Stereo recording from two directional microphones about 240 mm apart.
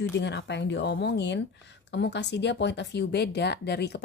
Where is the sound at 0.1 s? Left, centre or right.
Left.